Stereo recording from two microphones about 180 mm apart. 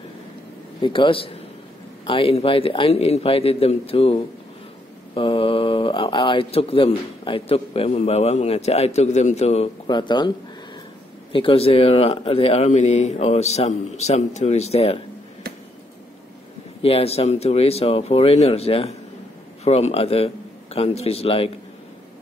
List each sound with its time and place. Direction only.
0.8 s a man's voice: 25° left (ahead or behind)
9.8 s a man's voice: 25° left (ahead or behind)
11.3 s speech: 30° left (ahead or behind)
16.8 s speech: 35° left (ahead or behind)